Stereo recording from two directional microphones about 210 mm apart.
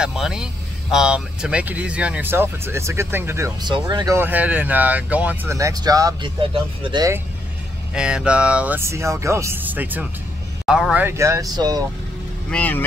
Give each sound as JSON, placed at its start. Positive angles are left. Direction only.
{"t": 0.0, "sound": "speech", "side_deg": 0}
{"t": 7.9, "sound": "speech", "side_deg": -5}
{"t": 12.4, "sound": "speech", "side_deg": 5}